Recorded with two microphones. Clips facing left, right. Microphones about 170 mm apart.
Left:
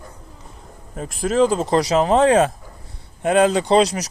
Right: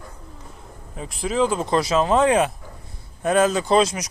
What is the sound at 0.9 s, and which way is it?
Speech, 45° left (ahead or behind).